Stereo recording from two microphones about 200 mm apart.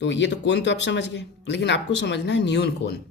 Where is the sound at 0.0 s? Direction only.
60° left (ahead or behind).